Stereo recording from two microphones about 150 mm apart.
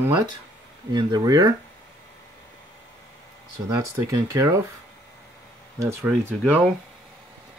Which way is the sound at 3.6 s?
20° right (ahead or behind).